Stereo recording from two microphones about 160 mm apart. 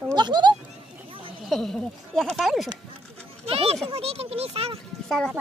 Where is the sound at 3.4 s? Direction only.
40° right (ahead or behind).